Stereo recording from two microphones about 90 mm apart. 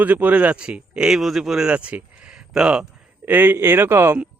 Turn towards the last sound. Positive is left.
turn(degrees=-25)  # may be behind; listen again after turning